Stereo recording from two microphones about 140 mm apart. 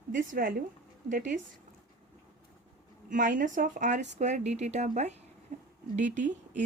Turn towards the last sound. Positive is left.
turn(degrees=-65)  # may be behind; listen again after turning